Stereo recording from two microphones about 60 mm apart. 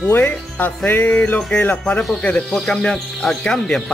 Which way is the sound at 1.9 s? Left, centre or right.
Left.